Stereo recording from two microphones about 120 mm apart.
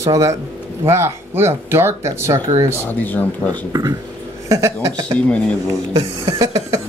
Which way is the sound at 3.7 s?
30° right (ahead or behind).